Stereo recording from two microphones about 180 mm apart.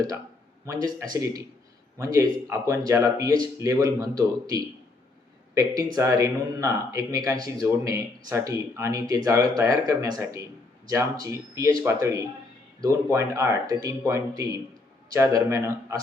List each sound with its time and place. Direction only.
0.6 s speech: 20° right (ahead or behind)